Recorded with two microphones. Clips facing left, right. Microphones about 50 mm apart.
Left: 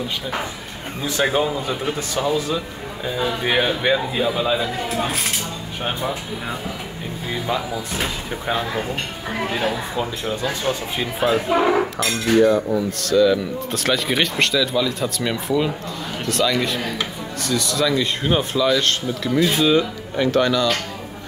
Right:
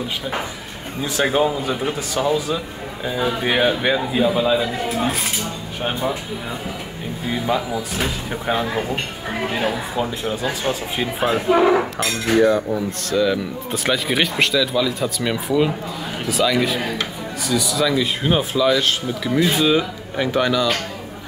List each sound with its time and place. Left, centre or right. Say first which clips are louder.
1.0 s speech: right 1 dB; centre
3.1 s cutlery: right 1 dB; centre
7.3 s cutlery: right 2 dB; centre
9.5 s speech: right 1 dB; centre
11.6 s cutlery: right 2 dB; centre
16.3 s speech: right 2 dB; centre